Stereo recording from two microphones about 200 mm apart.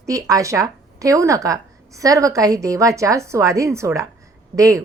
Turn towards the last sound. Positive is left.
turn(degrees=-15)  # may be behind; listen again after turning